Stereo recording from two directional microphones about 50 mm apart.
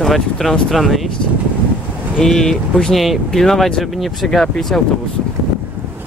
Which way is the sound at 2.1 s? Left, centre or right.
Centre.